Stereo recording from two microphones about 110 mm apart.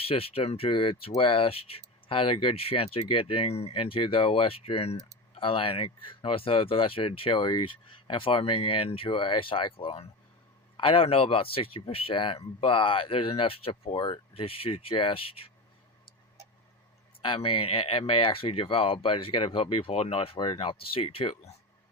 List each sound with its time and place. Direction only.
0.0 s speech: 60° left (ahead or behind)
17.2 s speech: 50° left (ahead or behind)